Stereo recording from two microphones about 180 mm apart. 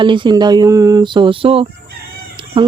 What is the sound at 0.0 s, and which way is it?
Speech, 25° right (ahead or behind).